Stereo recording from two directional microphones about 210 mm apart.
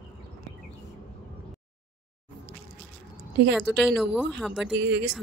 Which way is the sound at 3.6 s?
Centre (ahead or behind).